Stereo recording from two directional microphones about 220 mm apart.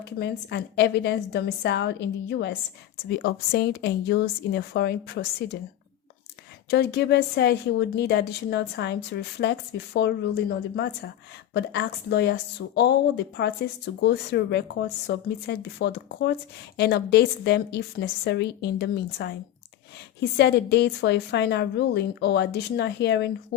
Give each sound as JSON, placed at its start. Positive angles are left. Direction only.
{"t": 0.0, "sound": "a woman's voice", "side_deg": 50}
{"t": 6.7, "sound": "a woman's voice", "side_deg": 50}